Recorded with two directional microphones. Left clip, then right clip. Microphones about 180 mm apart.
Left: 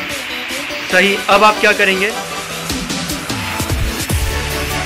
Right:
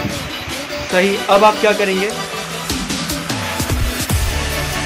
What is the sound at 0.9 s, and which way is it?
Speech, centre (ahead or behind).